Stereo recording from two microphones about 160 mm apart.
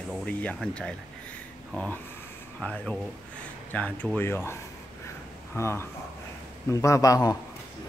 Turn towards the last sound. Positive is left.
turn(degrees=20)  # may be behind; listen again after turning